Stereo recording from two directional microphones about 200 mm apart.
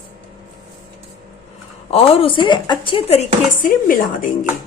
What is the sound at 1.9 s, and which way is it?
A woman's voice, 30° left (ahead or behind).